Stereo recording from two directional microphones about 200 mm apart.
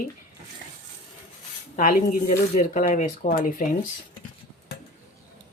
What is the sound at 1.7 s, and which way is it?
Speech, 40° left (ahead or behind).